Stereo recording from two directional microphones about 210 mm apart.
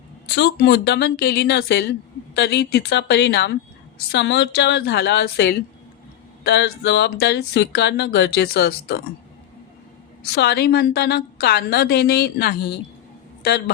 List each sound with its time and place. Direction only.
0.3 s a woman's voice: 55° left (ahead or behind)
10.3 s a woman's voice: 50° left (ahead or behind)